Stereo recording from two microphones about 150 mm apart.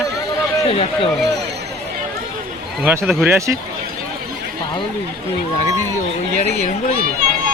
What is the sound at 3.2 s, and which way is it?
Speech, 20° right (ahead or behind).